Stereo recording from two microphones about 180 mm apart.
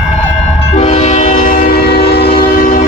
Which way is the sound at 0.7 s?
40° left (ahead or behind).